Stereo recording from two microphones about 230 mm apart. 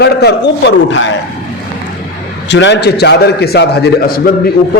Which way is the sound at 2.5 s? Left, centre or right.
Left.